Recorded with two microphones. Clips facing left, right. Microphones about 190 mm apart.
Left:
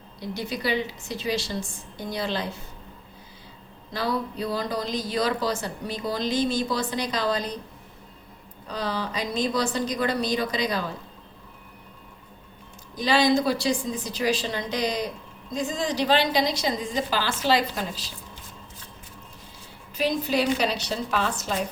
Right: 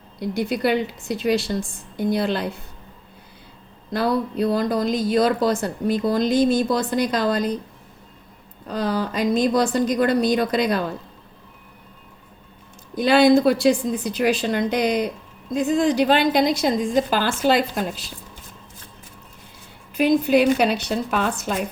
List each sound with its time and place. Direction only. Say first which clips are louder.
0.3 s a woman's voice: right 6 dB; 55° right (ahead or behind)
3.9 s speech: right 6 dB; 55° right (ahead or behind)
8.7 s speech: right 6 dB; 50° right (ahead or behind)
13.0 s a woman's voice: right 7 dB; 55° right (ahead or behind)
20.0 s a woman's voice: right 8 dB; 55° right (ahead or behind)